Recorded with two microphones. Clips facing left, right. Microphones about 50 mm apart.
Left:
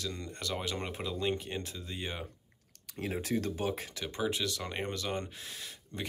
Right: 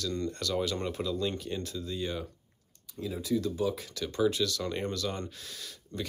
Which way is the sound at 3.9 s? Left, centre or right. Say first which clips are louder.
Right 5 dB; left.